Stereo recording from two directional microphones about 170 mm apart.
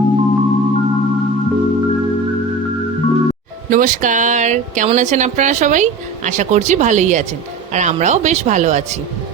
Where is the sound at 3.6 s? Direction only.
50° right (ahead or behind).